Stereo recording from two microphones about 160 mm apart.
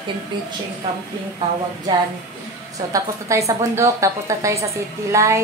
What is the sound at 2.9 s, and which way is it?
A woman's voice, 20° right (ahead or behind).